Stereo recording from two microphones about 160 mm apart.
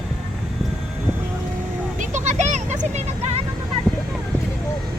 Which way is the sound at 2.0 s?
50° right (ahead or behind).